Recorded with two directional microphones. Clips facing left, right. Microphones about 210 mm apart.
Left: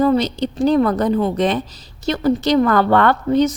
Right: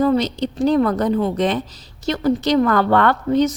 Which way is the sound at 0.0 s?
30° left (ahead or behind).